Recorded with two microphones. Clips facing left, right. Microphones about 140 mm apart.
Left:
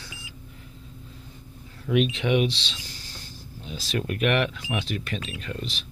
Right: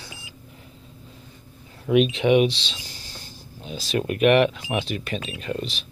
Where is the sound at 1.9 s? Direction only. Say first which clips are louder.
Right 5 dB; 15° right (ahead or behind).